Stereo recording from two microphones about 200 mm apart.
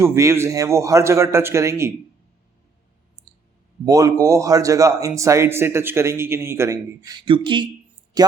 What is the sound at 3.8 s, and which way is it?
A man's voice, 15° right (ahead or behind).